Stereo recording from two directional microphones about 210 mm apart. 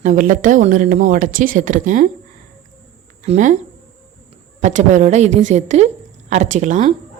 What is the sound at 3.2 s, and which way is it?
A man's voice, 35° right (ahead or behind).